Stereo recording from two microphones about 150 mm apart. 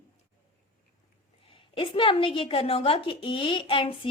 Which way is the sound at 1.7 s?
35° left (ahead or behind).